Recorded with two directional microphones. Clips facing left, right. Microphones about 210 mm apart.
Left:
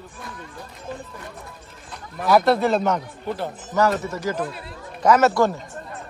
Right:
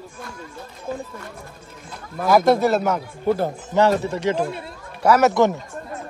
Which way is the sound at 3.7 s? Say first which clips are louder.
Right 3 dB; 30° right (ahead or behind).